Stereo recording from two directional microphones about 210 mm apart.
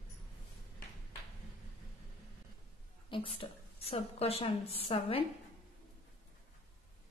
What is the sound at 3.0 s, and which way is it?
A woman's voice, 25° left (ahead or behind).